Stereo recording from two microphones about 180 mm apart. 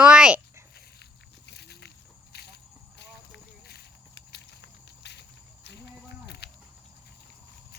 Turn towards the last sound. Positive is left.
turn(degrees=70)  # may be behind; listen again after turning